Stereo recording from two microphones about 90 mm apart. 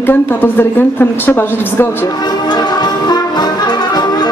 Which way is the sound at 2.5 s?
50° left (ahead or behind).